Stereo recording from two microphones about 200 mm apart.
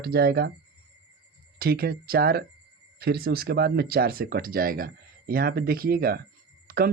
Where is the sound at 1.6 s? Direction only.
50° right (ahead or behind).